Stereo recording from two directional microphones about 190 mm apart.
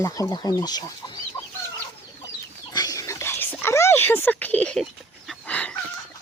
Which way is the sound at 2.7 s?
20° left (ahead or behind).